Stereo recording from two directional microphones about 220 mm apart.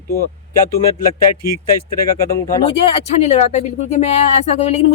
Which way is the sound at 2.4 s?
25° left (ahead or behind).